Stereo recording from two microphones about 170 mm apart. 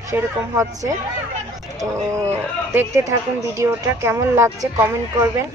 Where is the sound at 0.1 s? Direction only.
15° right (ahead or behind).